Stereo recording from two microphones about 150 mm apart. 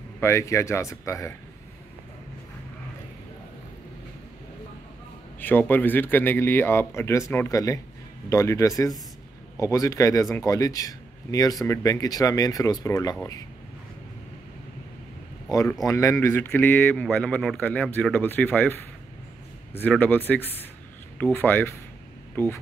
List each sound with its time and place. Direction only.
0.2 s a man's voice: 20° left (ahead or behind)
5.4 s a man's voice: 10° left (ahead or behind)
15.5 s a man's voice: 20° left (ahead or behind)
19.8 s a man's voice: 10° left (ahead or behind)